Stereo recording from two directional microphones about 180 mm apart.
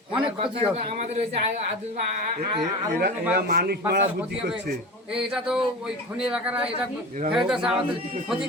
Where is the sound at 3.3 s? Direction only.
60° right (ahead or behind).